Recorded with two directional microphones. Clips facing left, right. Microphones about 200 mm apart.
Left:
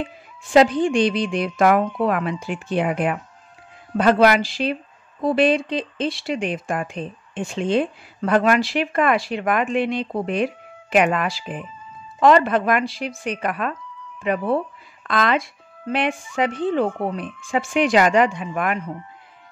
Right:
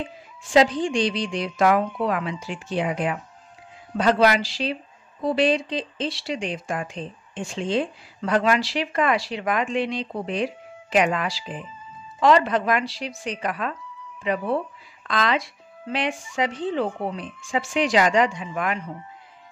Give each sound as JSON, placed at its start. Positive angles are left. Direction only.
{"t": 0.5, "sound": "speech", "side_deg": 55}